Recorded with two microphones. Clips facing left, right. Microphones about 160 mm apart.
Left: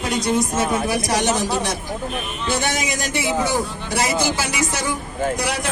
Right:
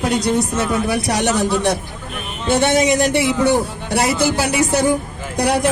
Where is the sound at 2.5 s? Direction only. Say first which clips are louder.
Right 8 dB; 25° right (ahead or behind).